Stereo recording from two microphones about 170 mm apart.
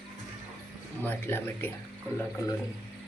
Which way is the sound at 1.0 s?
15° left (ahead or behind).